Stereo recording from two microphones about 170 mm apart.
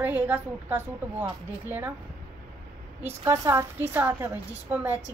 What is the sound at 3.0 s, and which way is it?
Speech, 15° right (ahead or behind).